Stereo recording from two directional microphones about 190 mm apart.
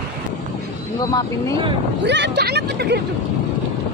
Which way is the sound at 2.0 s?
65° right (ahead or behind).